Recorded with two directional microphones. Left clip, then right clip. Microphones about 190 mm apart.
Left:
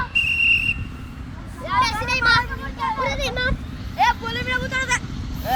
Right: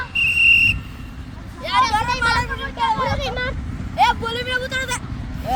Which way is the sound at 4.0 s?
40° right (ahead or behind).